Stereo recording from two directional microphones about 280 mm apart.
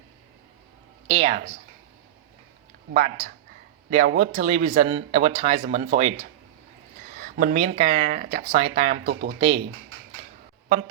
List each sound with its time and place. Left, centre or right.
1.0 s speech: right
2.9 s speech: right
7.2 s speech: right